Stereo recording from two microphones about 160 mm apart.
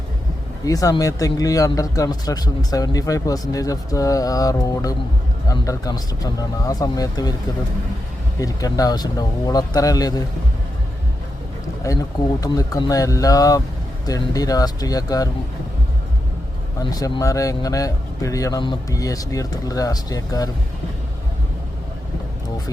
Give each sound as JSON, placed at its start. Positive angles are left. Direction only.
{"t": 0.6, "sound": "speech", "side_deg": 20}
{"t": 8.4, "sound": "speech", "side_deg": 20}
{"t": 11.8, "sound": "speech", "side_deg": 20}
{"t": 16.8, "sound": "speech", "side_deg": 25}